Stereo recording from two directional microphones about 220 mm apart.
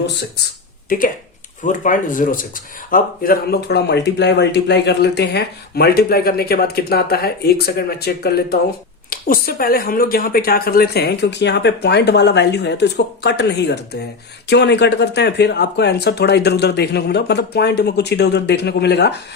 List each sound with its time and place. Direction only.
0.0 s speech: 50° left (ahead or behind)
0.9 s speech: 40° left (ahead or behind)